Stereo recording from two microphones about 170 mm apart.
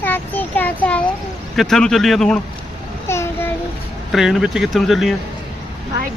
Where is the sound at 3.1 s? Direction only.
15° left (ahead or behind).